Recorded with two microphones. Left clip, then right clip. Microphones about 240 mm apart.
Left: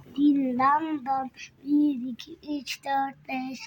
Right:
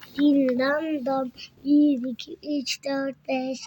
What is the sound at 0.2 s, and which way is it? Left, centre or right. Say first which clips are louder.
A child's voice: right 2 dB; centre.